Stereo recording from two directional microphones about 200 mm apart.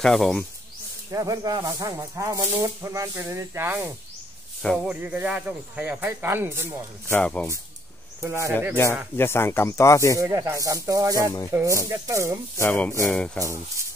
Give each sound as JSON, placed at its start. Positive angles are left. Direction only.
{"t": 0.0, "sound": "music", "side_deg": 0}
{"t": 1.1, "sound": "speech", "side_deg": -15}
{"t": 4.6, "sound": "music", "side_deg": 5}
{"t": 5.0, "sound": "speech", "side_deg": -5}
{"t": 7.1, "sound": "speech", "side_deg": 5}
{"t": 8.2, "sound": "speech", "side_deg": -15}
{"t": 9.1, "sound": "speech", "side_deg": 10}
{"t": 10.1, "sound": "speech", "side_deg": -15}
{"t": 12.5, "sound": "speech", "side_deg": 10}
{"t": 13.0, "sound": "music", "side_deg": 5}